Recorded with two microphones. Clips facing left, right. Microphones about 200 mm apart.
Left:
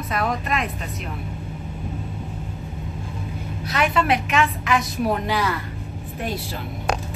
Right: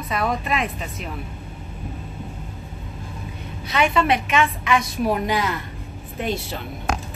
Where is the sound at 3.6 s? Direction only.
Centre (ahead or behind).